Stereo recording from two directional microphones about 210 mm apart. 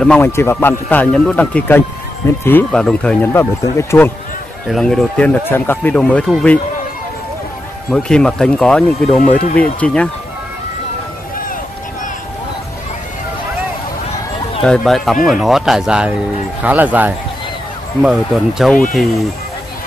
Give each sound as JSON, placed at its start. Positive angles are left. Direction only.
{"t": 0.0, "sound": "speech", "side_deg": 10}
{"t": 4.6, "sound": "speech", "side_deg": 0}
{"t": 7.9, "sound": "speech", "side_deg": 5}
{"t": 14.6, "sound": "speech", "side_deg": 0}